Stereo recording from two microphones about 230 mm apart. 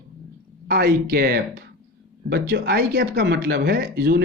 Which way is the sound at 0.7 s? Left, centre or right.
Right.